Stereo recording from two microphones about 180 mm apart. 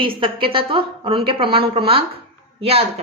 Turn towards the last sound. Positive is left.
turn(degrees=-35)  # may be behind; listen again after turning